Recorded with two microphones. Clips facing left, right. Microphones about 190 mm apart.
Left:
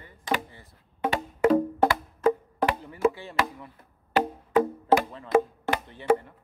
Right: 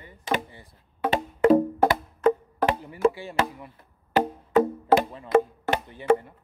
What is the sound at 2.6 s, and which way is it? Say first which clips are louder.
Chop: right 2 dB; 15° right (ahead or behind).